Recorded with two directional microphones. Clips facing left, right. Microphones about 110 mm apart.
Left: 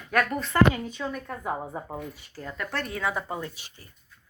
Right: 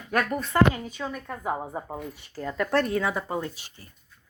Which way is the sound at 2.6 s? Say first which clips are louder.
Right 5 dB; 40° right (ahead or behind).